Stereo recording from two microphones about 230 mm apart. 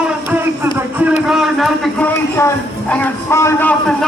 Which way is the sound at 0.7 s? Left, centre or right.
Centre.